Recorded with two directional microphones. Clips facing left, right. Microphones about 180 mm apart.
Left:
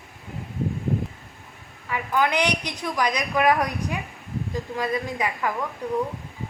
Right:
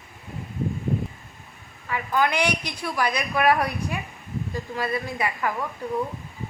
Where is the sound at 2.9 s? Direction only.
15° left (ahead or behind).